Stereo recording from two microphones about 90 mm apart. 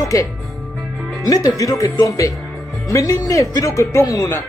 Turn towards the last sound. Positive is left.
turn(degrees=40)  # may be behind; listen again after turning